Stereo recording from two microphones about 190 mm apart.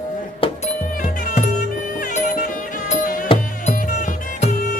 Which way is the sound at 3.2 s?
35° left (ahead or behind).